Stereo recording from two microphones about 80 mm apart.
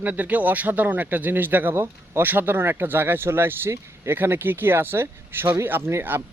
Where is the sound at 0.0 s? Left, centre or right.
Right.